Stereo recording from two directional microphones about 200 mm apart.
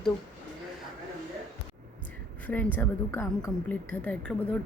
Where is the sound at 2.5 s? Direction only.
10° left (ahead or behind).